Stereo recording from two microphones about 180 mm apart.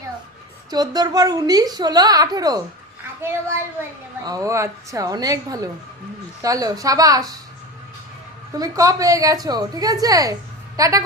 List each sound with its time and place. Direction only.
0.7 s a woman's voice: 20° right (ahead or behind)
4.3 s a woman's voice: 20° right (ahead or behind)
8.5 s a woman's voice: 20° right (ahead or behind)